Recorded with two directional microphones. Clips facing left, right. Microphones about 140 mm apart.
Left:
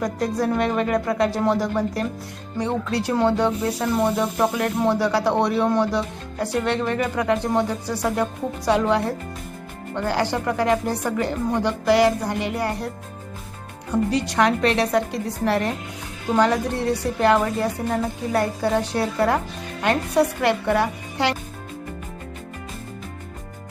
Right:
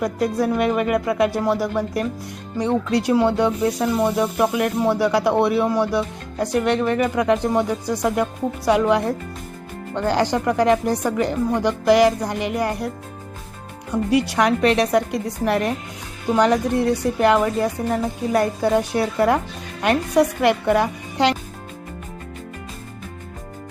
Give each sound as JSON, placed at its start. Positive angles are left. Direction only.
{"t": 0.0, "sound": "a woman's voice", "side_deg": -10}
{"t": 14.1, "sound": "a woman's voice", "side_deg": -15}